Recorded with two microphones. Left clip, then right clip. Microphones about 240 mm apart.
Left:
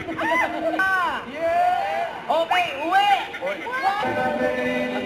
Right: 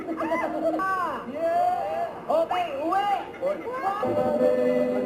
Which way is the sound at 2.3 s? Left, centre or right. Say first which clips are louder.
Left 4 dB; left.